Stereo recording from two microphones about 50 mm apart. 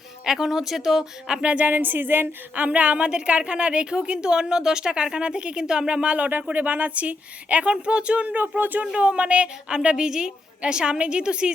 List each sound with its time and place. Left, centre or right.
0.3 s speech: centre
1.4 s a woman's voice: right
1.7 s a sound: right
2.6 s a woman's voice: right
9.0 s a woman's voice: right